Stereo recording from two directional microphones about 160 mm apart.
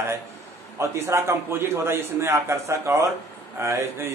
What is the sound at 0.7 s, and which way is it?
A man's voice, 15° right (ahead or behind).